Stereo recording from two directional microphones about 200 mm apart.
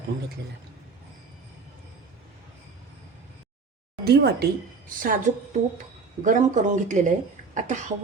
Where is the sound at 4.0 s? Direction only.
55° right (ahead or behind).